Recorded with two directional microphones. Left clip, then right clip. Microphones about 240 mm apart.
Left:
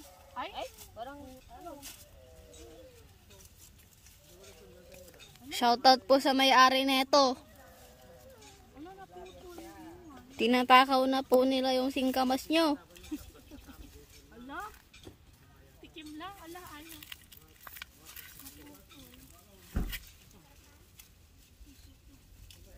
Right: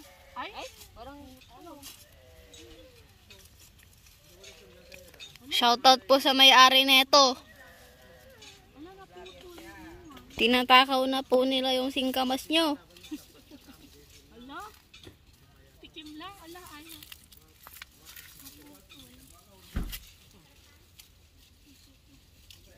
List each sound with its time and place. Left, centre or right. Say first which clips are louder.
4.9 s speech: right 9 dB; centre
9.1 s snake: right 1 dB; right
10.3 s speech: right 2 dB; centre
14.5 s a sound: left 1 dB; centre
15.8 s a sound: right 1 dB; centre
19.7 s vehicle: even; right